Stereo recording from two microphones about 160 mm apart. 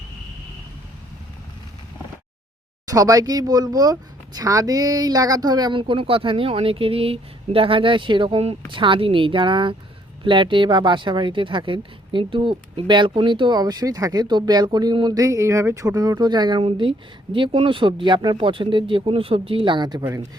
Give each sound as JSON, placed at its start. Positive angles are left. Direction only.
{"t": 2.9, "sound": "speech", "side_deg": -20}